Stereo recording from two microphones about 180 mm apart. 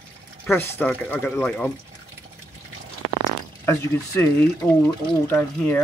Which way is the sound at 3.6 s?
15° left (ahead or behind).